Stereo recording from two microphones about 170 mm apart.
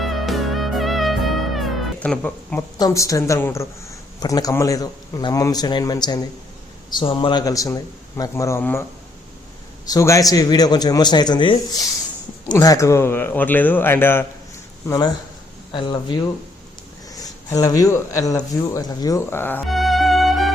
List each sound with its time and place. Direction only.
0.0 s music: centre (ahead or behind)
2.6 s a man's voice: 20° left (ahead or behind)
9.9 s a man's voice: 20° left (ahead or behind)
19.6 s music: centre (ahead or behind)